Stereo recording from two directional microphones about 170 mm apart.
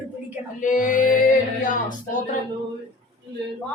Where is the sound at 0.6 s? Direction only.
50° left (ahead or behind).